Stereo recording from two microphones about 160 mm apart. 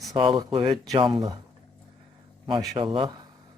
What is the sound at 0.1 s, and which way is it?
A man's voice, 30° right (ahead or behind).